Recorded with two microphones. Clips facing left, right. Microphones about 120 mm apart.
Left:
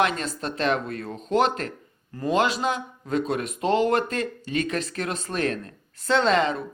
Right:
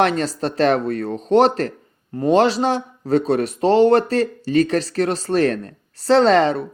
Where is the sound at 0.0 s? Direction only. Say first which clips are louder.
Right 6 dB; 35° right (ahead or behind).